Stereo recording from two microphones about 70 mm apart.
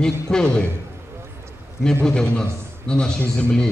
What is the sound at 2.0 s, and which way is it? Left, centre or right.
Speech, centre.